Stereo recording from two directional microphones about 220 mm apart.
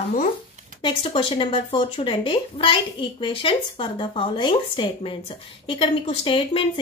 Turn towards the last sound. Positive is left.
turn(degrees=25)  # may be behind; listen again after turning